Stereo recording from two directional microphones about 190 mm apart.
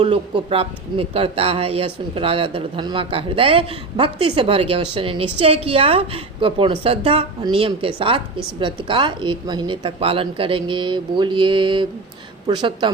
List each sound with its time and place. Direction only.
0.0 s speech: 30° right (ahead or behind)